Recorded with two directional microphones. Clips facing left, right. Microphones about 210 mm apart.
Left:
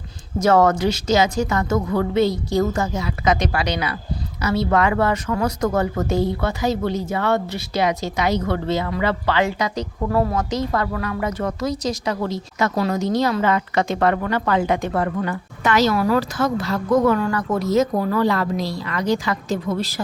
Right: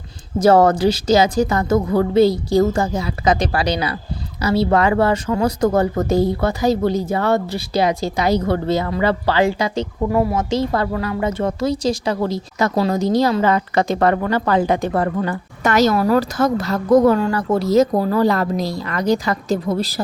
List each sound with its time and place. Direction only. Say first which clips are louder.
0.3 s a woman's voice: right 3 dB; 35° right (ahead or behind)
10.1 s a woman's voice: right 1 dB; 15° right (ahead or behind)
10.5 s a woman's voice: right 3 dB; 30° right (ahead or behind)
17.2 s a woman's voice: right 3 dB; 30° right (ahead or behind)